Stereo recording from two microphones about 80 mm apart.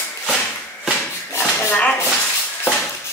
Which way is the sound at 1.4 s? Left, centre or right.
Centre.